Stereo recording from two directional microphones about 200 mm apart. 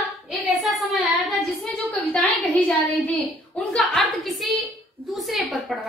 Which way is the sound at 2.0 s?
10° left (ahead or behind).